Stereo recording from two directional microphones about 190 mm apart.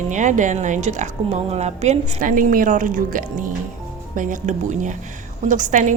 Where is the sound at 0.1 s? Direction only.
40° right (ahead or behind).